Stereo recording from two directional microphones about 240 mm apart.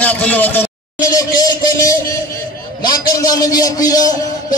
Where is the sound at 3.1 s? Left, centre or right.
Centre.